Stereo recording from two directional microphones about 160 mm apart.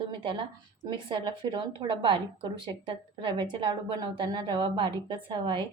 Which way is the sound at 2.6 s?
30° right (ahead or behind).